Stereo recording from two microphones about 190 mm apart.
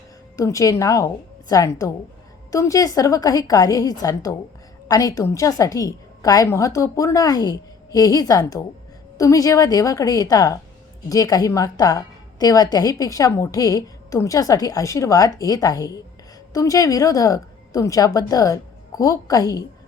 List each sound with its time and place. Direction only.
0.3 s a woman's voice: 15° left (ahead or behind)